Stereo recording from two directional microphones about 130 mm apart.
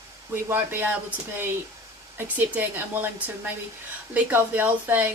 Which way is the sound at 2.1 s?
15° right (ahead or behind).